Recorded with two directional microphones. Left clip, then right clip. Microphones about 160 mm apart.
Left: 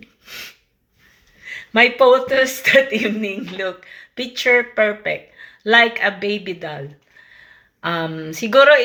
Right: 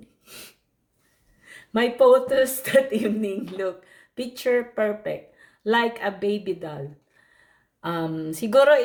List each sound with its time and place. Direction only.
1.5 s speech: 40° right (ahead or behind)